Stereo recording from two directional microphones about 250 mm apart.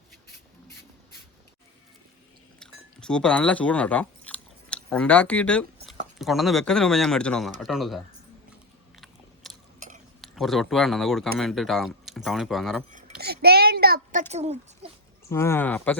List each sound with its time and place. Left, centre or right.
2.6 s a sound: centre
6.1 s speech: centre
9.0 s biting: centre
9.8 s chewing: right
10.2 s speech: centre
12.9 s a child's voice: right
15.3 s speech: centre